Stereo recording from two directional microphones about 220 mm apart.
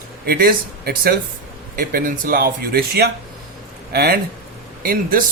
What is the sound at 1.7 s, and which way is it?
Speech, 40° right (ahead or behind).